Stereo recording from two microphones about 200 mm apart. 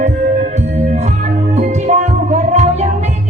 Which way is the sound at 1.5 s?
35° right (ahead or behind).